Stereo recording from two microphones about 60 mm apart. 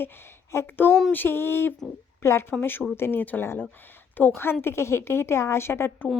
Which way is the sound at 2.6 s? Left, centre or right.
Left.